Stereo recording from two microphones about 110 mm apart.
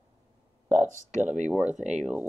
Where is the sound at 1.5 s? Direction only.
10° right (ahead or behind).